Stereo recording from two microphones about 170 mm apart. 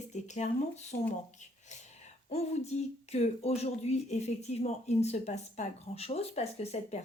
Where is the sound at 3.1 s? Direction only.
40° left (ahead or behind).